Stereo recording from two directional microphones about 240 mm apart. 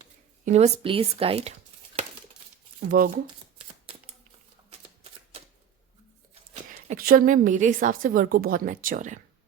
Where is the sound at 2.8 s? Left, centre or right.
Right.